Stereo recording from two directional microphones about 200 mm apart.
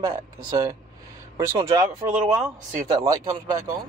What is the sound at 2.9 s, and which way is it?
Speech, 15° right (ahead or behind).